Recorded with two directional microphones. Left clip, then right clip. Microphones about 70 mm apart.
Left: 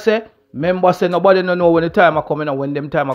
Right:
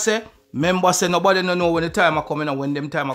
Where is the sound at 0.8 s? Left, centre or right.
Centre.